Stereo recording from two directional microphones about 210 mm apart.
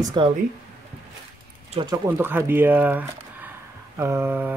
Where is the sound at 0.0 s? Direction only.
20° right (ahead or behind).